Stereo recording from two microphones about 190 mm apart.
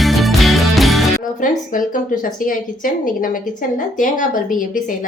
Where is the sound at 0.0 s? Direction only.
Centre (ahead or behind).